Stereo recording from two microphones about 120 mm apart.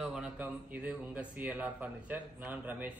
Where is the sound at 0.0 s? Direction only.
5° right (ahead or behind).